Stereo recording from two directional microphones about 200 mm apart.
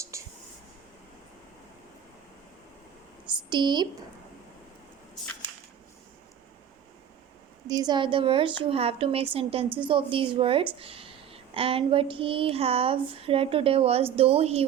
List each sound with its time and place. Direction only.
0.1 s whispering: 15° right (ahead or behind)
3.5 s a woman's voice: 20° right (ahead or behind)
7.7 s a woman's voice: 20° right (ahead or behind)